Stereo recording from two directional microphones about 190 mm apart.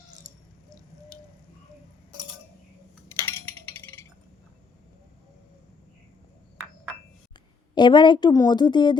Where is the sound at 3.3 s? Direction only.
10° left (ahead or behind).